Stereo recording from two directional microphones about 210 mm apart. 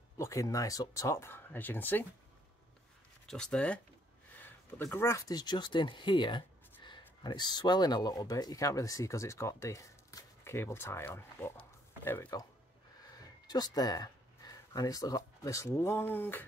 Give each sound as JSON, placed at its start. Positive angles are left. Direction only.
{"t": 0.2, "sound": "speech", "side_deg": 15}
{"t": 3.3, "sound": "speech", "side_deg": 5}